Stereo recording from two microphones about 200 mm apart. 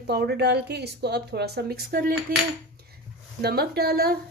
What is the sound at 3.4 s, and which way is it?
Speech, 50° right (ahead or behind).